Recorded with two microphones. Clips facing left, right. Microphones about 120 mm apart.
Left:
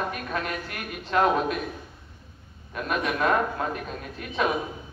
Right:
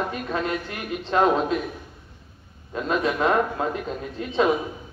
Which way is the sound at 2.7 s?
25° right (ahead or behind).